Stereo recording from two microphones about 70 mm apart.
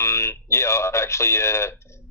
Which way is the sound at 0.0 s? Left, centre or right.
Left.